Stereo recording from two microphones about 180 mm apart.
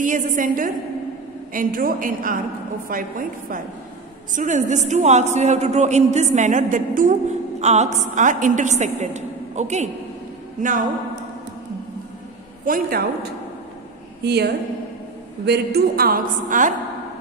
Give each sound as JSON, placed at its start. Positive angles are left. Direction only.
{"t": 0.0, "sound": "a woman's voice", "side_deg": -45}
{"t": 12.6, "sound": "a woman's voice", "side_deg": -55}
{"t": 14.2, "sound": "a woman's voice", "side_deg": -65}